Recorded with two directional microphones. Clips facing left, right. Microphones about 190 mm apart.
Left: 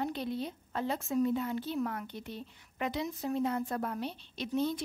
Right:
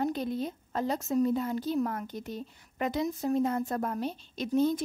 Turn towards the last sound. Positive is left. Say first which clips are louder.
# right 5 dB
turn(degrees=-45)  # may be behind; listen again after turning